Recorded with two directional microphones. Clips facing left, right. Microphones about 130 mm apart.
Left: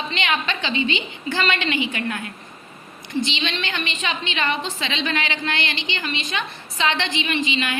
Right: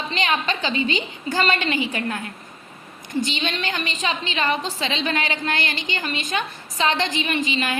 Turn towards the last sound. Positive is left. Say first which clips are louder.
# even
turn(degrees=-40)  # may be behind; listen again after turning